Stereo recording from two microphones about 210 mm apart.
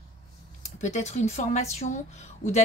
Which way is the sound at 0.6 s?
35° left (ahead or behind).